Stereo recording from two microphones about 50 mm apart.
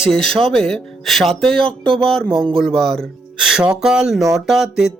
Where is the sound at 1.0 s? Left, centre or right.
Centre.